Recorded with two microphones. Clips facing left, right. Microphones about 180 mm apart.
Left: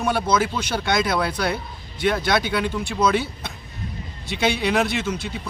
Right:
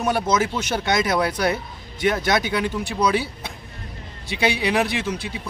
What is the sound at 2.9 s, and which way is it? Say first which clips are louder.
A man's voice: left 1 dB; 10° right (ahead or behind).